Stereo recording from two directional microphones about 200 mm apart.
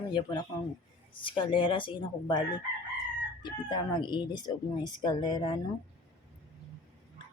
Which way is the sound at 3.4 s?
20° left (ahead or behind).